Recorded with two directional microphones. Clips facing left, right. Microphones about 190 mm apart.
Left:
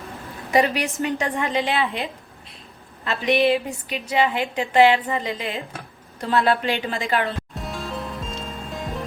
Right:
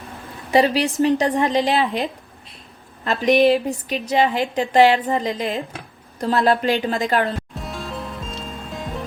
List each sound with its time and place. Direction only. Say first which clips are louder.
0.5 s a woman's voice: right 3 dB; 30° right (ahead or behind)
7.5 s music: even; centre (ahead or behind)